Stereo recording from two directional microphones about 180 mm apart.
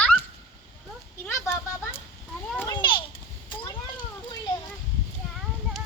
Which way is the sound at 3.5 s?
25° left (ahead or behind).